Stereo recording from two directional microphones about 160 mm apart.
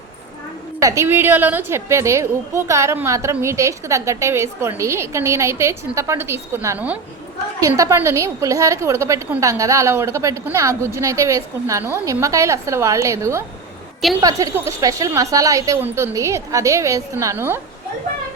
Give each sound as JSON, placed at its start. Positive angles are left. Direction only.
{"t": 0.8, "sound": "a woman's voice", "side_deg": -20}